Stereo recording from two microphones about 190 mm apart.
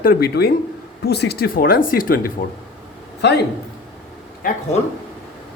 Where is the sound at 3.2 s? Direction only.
65° left (ahead or behind).